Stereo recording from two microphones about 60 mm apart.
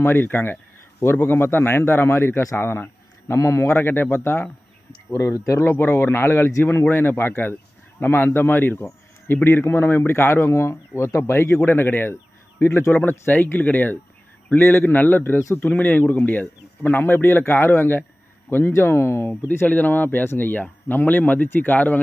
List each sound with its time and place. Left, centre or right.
0.0 s a man's voice: left
2.6 s a sound: left
3.3 s a man's voice: left
5.5 s a man's voice: left
12.6 s a man's voice: left
12.9 s a man's voice: left
19.6 s speech: left